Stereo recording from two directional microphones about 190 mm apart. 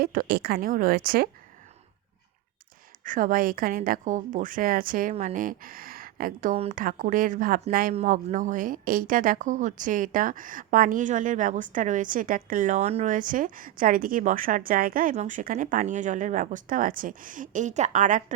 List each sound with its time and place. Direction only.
0.0 s speech: 50° right (ahead or behind)
3.0 s speech: 45° right (ahead or behind)